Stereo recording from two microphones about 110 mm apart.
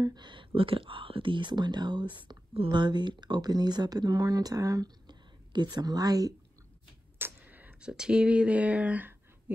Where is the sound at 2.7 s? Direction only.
40° right (ahead or behind).